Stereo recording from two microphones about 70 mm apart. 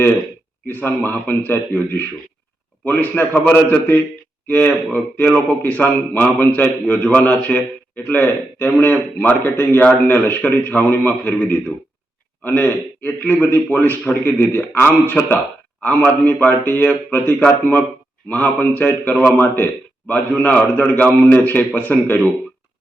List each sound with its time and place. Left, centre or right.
0.7 s a man's voice: left
12.5 s speech: left